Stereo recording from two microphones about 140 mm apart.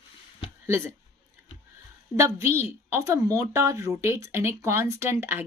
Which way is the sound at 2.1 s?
20° right (ahead or behind).